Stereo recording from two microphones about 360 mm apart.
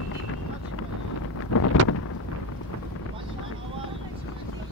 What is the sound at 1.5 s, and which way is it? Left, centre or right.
Wind noise, left.